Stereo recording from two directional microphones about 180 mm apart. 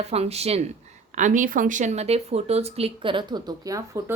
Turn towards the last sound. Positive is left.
turn(degrees=-15)  # may be behind; listen again after turning